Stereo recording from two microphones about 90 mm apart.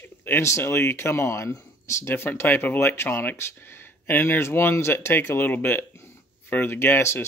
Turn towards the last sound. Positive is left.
turn(degrees=25)  # may be behind; listen again after turning